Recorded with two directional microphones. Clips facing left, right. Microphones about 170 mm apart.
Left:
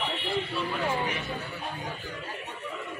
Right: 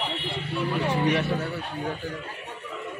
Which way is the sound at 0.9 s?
70° right (ahead or behind).